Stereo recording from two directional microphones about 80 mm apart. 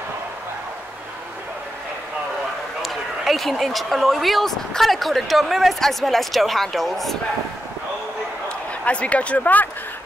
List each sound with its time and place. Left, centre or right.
2.8 s speech: centre
8.8 s speech: centre